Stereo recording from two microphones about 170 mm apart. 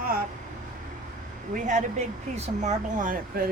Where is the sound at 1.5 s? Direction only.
45° right (ahead or behind).